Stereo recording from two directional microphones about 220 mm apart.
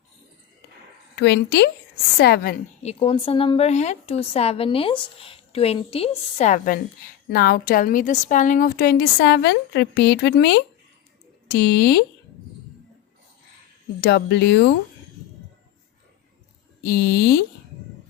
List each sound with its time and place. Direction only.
1.1 s a woman's voice: 50° left (ahead or behind)
2.8 s a woman's voice: 25° left (ahead or behind)
7.3 s a woman's voice: 45° left (ahead or behind)
14.0 s a woman's voice: 50° left (ahead or behind)
16.8 s a woman's voice: 45° left (ahead or behind)